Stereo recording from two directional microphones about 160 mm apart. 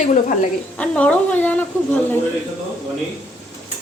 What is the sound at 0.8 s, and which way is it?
Speech, 10° left (ahead or behind).